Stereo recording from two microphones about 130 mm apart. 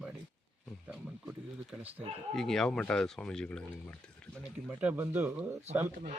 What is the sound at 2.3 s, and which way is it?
Speech, 5° left (ahead or behind).